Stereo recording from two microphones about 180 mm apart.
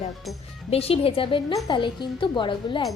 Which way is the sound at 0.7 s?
35° left (ahead or behind).